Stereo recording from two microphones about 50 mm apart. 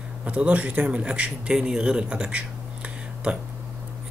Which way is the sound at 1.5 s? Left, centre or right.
Centre.